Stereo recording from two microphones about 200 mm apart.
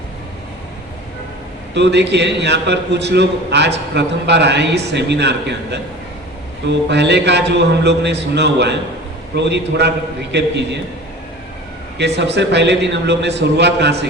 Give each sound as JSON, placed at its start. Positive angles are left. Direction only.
{"t": 1.7, "sound": "a man's voice", "side_deg": -60}
{"t": 11.9, "sound": "a man's voice", "side_deg": -60}